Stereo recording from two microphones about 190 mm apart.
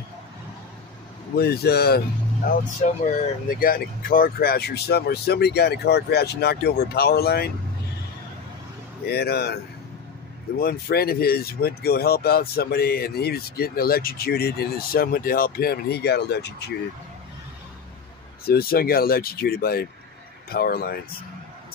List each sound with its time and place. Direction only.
1.4 s speech: 55° left (ahead or behind)
9.0 s speech: 55° left (ahead or behind)
10.6 s speech: 55° left (ahead or behind)
18.5 s speech: 50° left (ahead or behind)